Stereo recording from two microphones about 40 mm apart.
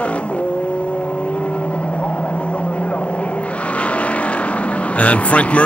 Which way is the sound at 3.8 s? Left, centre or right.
Left.